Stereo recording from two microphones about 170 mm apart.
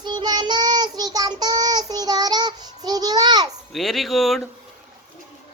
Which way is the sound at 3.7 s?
Centre (ahead or behind).